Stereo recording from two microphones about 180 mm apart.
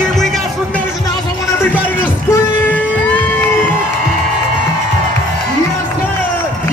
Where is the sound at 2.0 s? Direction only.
10° left (ahead or behind).